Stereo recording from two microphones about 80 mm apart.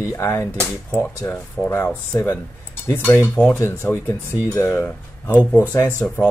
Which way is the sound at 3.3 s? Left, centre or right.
Centre.